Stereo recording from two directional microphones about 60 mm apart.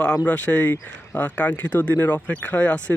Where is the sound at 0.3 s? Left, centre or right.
Left.